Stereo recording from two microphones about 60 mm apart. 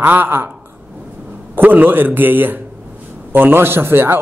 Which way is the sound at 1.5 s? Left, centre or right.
Right.